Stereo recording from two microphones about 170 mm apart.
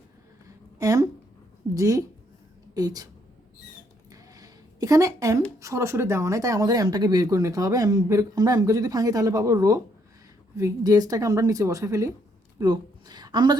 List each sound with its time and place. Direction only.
0.4 s a sound: 20° right (ahead or behind)
1.7 s speech: 20° right (ahead or behind)
4.1 s a woman's voice: 20° right (ahead or behind)